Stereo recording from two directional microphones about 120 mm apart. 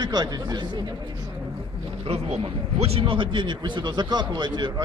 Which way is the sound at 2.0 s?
55° right (ahead or behind).